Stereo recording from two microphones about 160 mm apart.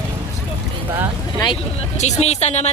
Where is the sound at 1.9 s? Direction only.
45° left (ahead or behind).